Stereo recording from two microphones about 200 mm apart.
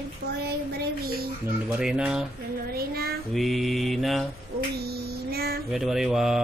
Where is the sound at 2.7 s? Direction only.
50° right (ahead or behind).